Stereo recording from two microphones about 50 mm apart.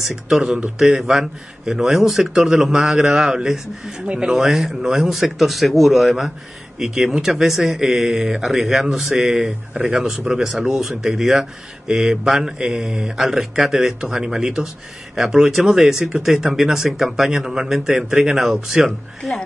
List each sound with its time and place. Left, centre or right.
0.1 s a man's voice: centre
4.0 s speech: right
4.3 s a man's voice: centre
18.9 s a man's voice: centre